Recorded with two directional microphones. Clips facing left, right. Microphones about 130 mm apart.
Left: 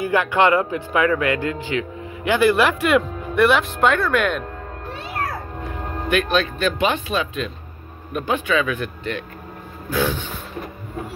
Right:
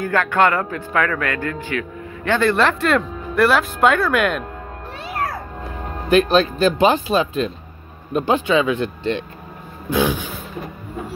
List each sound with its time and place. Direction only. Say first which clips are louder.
0.0 s a man's voice: even; 15° left (ahead or behind); by 4.5 s 5° right (ahead or behind)
6.0 s speech: right 5 dB; 35° right (ahead or behind)